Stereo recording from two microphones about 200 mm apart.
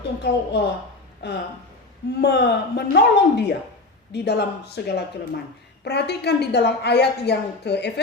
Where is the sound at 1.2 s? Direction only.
60° left (ahead or behind).